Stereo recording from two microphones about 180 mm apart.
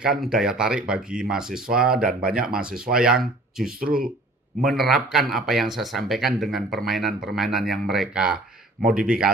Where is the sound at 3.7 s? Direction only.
55° right (ahead or behind).